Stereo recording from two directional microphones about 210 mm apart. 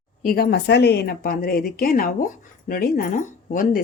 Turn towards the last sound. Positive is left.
turn(degrees=40)  # may be behind; listen again after turning